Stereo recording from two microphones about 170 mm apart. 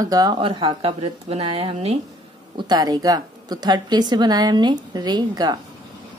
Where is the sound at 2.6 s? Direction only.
25° right (ahead or behind).